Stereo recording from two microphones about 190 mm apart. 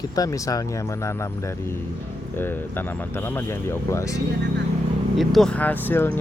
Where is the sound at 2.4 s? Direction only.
10° left (ahead or behind).